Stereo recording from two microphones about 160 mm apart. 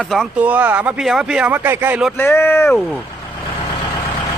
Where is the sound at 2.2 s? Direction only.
15° left (ahead or behind).